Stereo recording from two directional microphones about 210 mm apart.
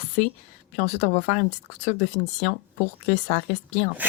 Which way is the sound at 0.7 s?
35° left (ahead or behind).